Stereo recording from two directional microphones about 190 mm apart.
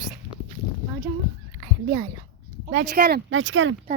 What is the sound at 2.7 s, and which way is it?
Speech, 55° right (ahead or behind).